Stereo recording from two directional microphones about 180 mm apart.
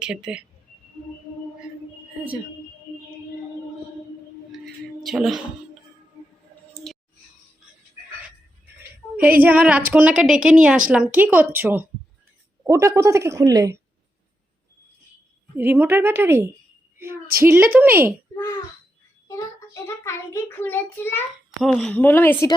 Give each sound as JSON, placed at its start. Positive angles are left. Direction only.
{"t": 0.0, "sound": "speech", "side_deg": -5}
{"t": 4.6, "sound": "a sound", "side_deg": 0}
{"t": 9.2, "sound": "a woman's voice", "side_deg": -10}
{"t": 15.5, "sound": "a woman's voice", "side_deg": -10}
{"t": 19.3, "sound": "a child's voice", "side_deg": 15}
{"t": 21.6, "sound": "a child's voice", "side_deg": 0}